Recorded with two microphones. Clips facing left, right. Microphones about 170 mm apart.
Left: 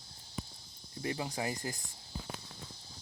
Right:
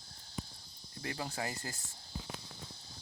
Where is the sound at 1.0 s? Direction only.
15° left (ahead or behind).